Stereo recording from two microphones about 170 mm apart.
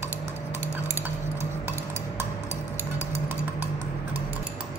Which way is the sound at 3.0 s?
15° right (ahead or behind).